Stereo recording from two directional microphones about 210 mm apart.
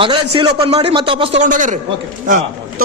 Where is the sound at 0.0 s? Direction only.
25° right (ahead or behind).